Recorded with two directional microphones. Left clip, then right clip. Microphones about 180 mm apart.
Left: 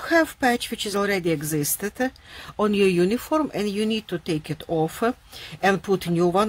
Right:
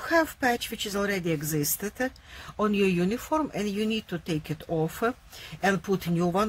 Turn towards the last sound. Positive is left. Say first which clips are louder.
# left 6 dB
turn(degrees=30)  # may be behind; listen again after turning